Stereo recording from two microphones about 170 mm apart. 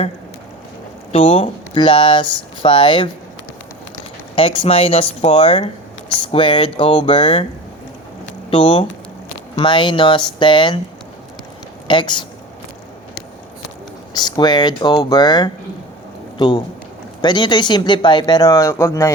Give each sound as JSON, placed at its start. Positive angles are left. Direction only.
{"t": 1.1, "sound": "speech", "side_deg": 35}
{"t": 4.4, "sound": "speech", "side_deg": 30}
{"t": 8.4, "sound": "speech", "side_deg": 30}
{"t": 11.9, "sound": "speech", "side_deg": 30}
{"t": 14.2, "sound": "speech", "side_deg": 25}